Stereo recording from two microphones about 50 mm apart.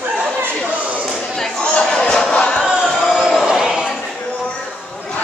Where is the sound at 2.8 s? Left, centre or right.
Centre.